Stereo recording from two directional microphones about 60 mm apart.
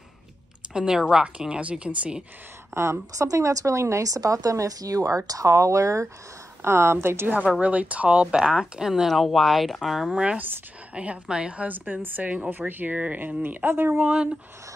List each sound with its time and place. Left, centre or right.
0.7 s speech: centre
2.7 s a woman's voice: right
3.3 s speech: right
6.6 s a woman's voice: right
7.2 s speech: right
9.0 s speech: centre
10.1 s speech: right
11.6 s speech: right
13.9 s speech: centre